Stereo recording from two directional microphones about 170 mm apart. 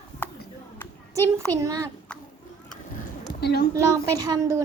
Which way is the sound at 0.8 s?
10° left (ahead or behind).